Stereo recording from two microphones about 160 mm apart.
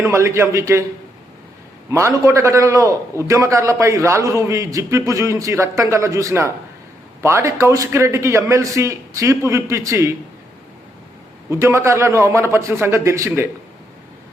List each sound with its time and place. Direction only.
0.0 s a man's voice: 15° right (ahead or behind)
1.9 s a man's voice: 15° right (ahead or behind)
11.4 s a man's voice: 15° right (ahead or behind)